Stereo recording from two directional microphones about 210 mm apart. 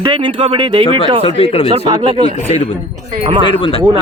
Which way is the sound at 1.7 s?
25° right (ahead or behind).